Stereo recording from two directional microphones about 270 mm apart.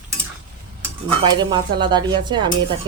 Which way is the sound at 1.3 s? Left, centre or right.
Centre.